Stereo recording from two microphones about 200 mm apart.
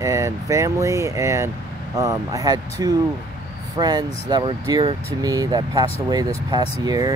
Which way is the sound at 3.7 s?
20° right (ahead or behind).